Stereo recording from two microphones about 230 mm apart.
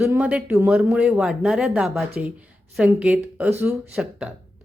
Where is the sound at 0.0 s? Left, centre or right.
Centre.